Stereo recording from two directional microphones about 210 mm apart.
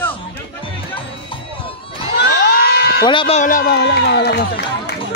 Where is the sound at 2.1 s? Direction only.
50° left (ahead or behind).